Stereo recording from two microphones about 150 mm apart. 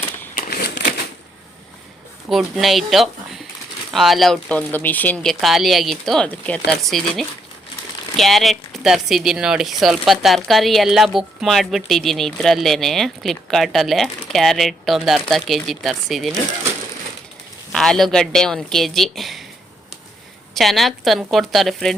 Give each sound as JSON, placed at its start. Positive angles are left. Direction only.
{"t": 0.3, "sound": "crumpling", "side_deg": 80}
{"t": 2.3, "sound": "a woman's voice", "side_deg": 0}
{"t": 17.7, "sound": "a woman's voice", "side_deg": 0}
{"t": 20.5, "sound": "a woman's voice", "side_deg": 0}